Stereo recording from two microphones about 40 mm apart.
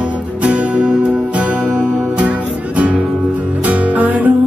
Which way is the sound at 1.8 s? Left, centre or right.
Right.